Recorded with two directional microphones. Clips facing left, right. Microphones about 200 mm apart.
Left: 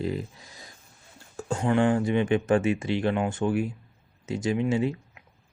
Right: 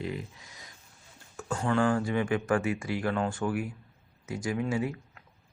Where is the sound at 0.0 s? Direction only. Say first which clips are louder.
Left 5 dB; 35° left (ahead or behind).